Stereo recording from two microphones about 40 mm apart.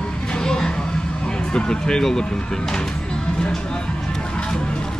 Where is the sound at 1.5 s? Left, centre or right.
Left.